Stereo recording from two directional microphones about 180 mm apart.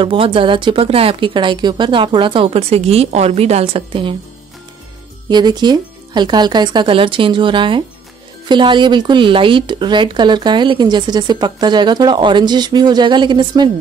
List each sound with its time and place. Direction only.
0.0 s speech: 30° right (ahead or behind)
5.3 s speech: 25° right (ahead or behind)